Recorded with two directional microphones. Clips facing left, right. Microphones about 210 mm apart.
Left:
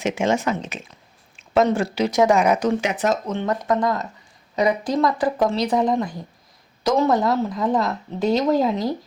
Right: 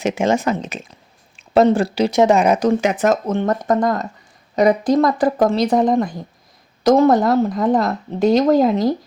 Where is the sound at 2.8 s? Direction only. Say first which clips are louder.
Right 5 dB; 45° right (ahead or behind).